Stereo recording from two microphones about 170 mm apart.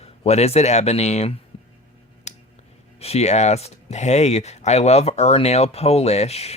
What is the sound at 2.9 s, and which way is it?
Speech, 40° left (ahead or behind).